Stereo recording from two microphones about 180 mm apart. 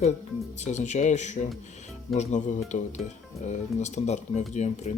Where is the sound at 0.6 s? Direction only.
40° left (ahead or behind).